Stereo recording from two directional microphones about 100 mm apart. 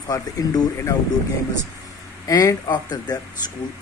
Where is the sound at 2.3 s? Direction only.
35° left (ahead or behind).